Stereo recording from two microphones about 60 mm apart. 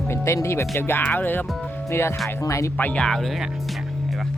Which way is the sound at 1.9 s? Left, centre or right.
Left.